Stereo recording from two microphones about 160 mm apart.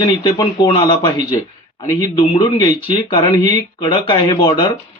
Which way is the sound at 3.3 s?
30° left (ahead or behind).